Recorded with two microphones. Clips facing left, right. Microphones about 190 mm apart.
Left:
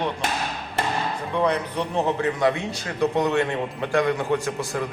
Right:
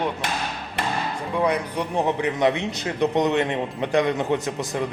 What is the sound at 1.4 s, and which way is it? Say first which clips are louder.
A man's voice: right 1 dB; 10° right (ahead or behind).